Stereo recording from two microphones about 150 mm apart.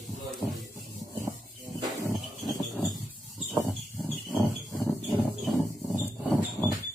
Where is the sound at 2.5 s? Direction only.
Centre (ahead or behind).